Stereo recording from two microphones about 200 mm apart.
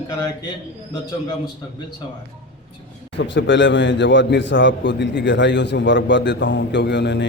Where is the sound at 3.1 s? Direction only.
65° left (ahead or behind).